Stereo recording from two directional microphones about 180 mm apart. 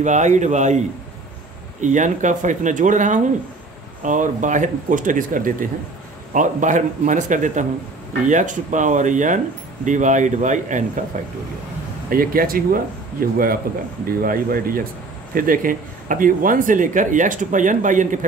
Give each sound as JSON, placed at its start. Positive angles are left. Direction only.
{"t": 0.0, "sound": "a man's voice", "side_deg": -40}